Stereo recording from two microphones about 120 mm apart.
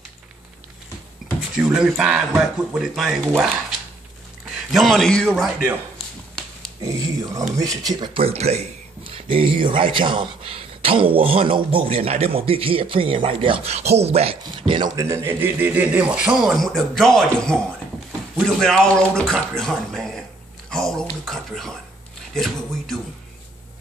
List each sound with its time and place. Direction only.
1.5 s speech: 5° right (ahead or behind)
4.6 s speech: centre (ahead or behind)
6.8 s speech: 30° right (ahead or behind)
8.0 s speech: 50° right (ahead or behind)
15.0 s speech: 25° right (ahead or behind); by 22.9 s 5° left (ahead or behind)